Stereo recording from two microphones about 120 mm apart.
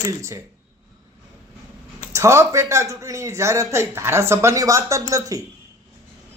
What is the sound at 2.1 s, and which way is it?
A man's voice, 20° right (ahead or behind).